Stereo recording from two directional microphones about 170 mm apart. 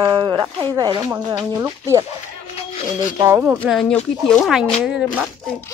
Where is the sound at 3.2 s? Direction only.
15° right (ahead or behind).